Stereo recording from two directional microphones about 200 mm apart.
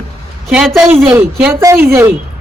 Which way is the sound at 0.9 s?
10° right (ahead or behind).